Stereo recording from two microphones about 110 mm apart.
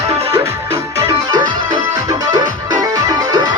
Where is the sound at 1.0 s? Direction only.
35° right (ahead or behind).